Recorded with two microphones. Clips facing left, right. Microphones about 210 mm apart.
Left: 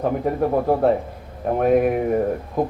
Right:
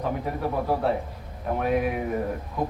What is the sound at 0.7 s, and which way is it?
A man's voice, 45° left (ahead or behind).